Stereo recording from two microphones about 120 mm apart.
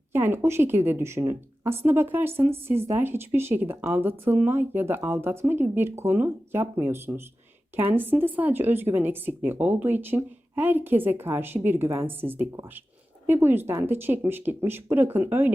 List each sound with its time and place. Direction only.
0.1 s speech: 20° right (ahead or behind)